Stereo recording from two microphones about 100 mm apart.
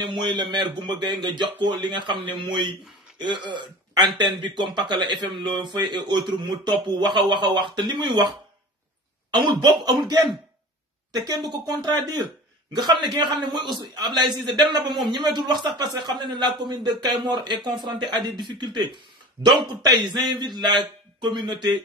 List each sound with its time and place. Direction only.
0.0 s a man's voice: 50° right (ahead or behind)
9.3 s a man's voice: 50° right (ahead or behind)